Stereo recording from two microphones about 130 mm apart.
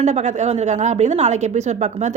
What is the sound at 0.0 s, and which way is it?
A woman's voice, 65° right (ahead or behind).